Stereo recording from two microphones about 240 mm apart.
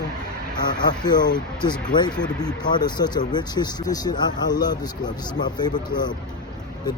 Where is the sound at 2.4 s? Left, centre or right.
Centre.